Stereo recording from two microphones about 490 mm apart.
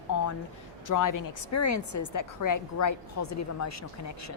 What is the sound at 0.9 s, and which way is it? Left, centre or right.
A woman's voice, left.